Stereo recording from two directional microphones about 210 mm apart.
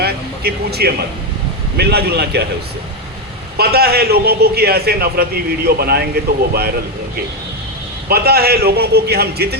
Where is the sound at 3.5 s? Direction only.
50° right (ahead or behind).